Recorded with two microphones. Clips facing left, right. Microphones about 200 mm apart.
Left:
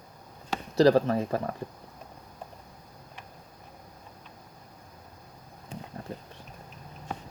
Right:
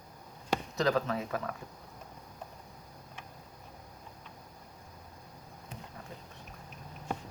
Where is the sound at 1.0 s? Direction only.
50° left (ahead or behind).